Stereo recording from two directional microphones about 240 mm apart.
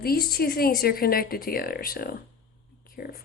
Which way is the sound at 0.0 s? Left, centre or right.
Left.